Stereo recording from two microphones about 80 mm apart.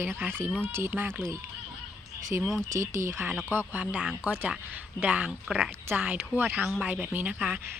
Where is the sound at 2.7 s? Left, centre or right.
Right.